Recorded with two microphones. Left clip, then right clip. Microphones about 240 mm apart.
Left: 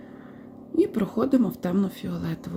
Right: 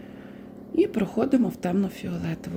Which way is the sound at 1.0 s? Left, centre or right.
Centre.